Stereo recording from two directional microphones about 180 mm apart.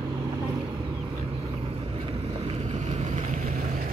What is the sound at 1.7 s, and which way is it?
Boat, 35° right (ahead or behind).